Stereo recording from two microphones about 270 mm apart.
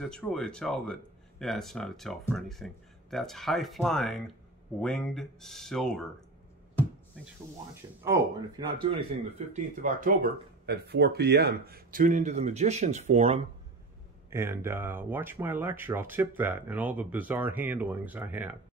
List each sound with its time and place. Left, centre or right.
0.0 s speech: centre
8.0 s speech: centre
9.5 s speech: right
14.3 s speech: centre